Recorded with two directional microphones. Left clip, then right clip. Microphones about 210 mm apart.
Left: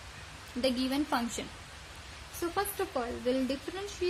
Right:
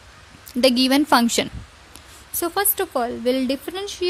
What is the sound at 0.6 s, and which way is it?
A woman's voice, 45° right (ahead or behind).